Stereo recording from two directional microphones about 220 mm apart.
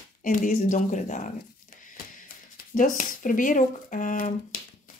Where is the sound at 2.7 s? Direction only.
35° left (ahead or behind).